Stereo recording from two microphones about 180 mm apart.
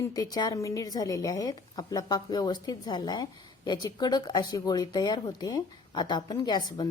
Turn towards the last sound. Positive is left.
turn(degrees=25)  # may be behind; listen again after turning